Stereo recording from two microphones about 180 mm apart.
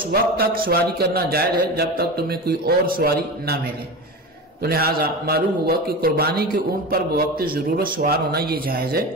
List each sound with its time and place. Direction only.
0.1 s a man's voice: 60° right (ahead or behind)
4.6 s a man's voice: 60° right (ahead or behind)